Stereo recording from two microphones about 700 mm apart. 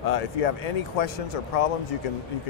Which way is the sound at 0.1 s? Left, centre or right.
Left.